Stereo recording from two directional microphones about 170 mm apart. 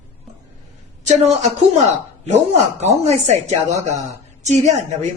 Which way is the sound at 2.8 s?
40° right (ahead or behind).